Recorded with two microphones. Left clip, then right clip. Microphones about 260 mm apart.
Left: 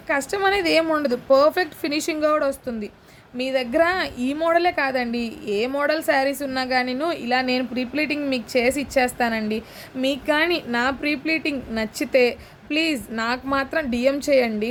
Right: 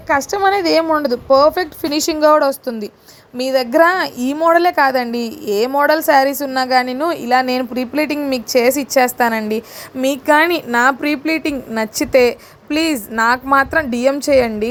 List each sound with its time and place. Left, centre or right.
0.3 s a woman's voice: centre
0.6 s a woman's voice: centre